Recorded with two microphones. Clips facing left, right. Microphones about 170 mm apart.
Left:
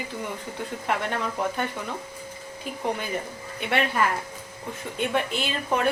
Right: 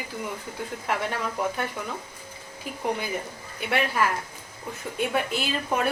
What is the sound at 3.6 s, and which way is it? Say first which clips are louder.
A woman's voice: left 1 dB; 5° right (ahead or behind).